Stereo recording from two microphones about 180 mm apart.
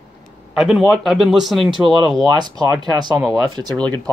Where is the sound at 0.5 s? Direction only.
Centre (ahead or behind).